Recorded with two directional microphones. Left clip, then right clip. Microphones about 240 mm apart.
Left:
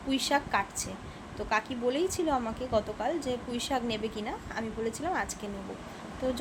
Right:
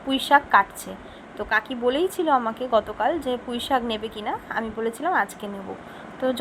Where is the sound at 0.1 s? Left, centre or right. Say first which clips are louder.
Right 11 dB; centre.